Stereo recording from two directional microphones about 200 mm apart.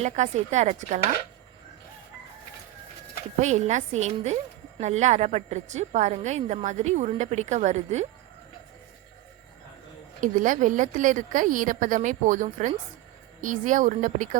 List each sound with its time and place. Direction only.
0.0 s a woman's voice: 35° right (ahead or behind)
3.4 s a woman's voice: 35° right (ahead or behind)
10.2 s a woman's voice: 40° right (ahead or behind)